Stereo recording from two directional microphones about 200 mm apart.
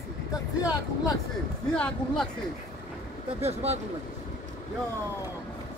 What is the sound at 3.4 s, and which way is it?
Speech, 30° right (ahead or behind).